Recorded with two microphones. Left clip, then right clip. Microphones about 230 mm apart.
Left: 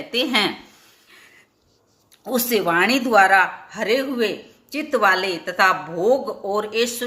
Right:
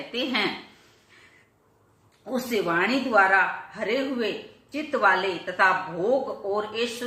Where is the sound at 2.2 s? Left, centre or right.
Left.